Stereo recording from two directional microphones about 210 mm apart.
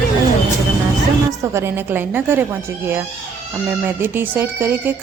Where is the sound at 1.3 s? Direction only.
15° right (ahead or behind).